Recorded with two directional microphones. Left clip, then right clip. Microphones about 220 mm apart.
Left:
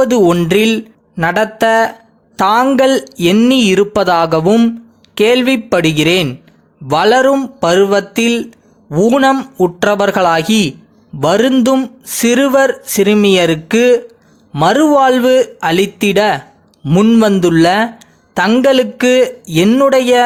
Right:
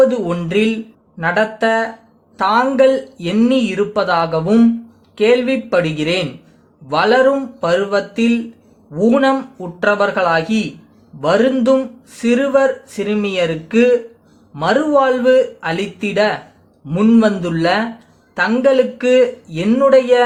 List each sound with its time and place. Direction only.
0.0 s speech: 40° left (ahead or behind)